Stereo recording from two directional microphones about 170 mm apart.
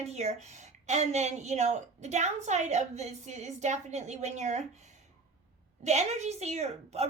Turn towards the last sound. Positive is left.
turn(degrees=-40)  # may be behind; listen again after turning